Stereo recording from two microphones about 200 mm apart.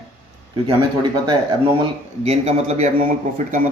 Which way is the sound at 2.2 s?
35° right (ahead or behind).